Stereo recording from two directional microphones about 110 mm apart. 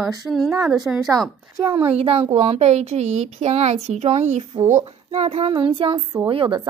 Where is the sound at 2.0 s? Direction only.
65° right (ahead or behind).